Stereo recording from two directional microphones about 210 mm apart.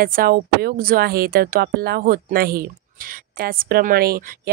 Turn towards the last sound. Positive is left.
turn(degrees=-45)  # may be behind; listen again after turning